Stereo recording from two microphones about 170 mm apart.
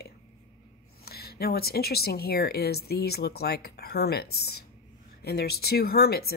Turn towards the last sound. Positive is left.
turn(degrees=65)  # may be behind; listen again after turning